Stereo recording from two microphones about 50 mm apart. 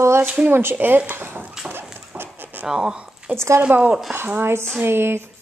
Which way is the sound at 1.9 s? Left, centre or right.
Right.